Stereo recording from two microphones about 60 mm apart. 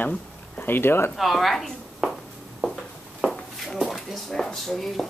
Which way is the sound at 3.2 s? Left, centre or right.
Centre.